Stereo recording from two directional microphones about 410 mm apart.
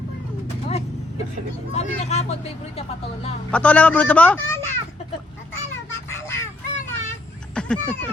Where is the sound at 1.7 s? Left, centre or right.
Centre.